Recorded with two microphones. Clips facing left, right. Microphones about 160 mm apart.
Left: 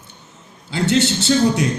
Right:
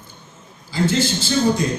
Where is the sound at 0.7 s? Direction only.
70° left (ahead or behind).